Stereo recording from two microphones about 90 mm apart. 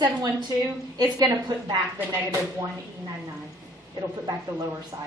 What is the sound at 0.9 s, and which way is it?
Speech, 50° right (ahead or behind).